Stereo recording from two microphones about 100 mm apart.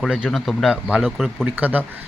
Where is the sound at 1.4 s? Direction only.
15° right (ahead or behind).